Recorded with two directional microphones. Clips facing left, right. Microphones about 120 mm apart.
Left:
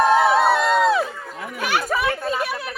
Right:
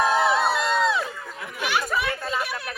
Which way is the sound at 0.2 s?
55° left (ahead or behind).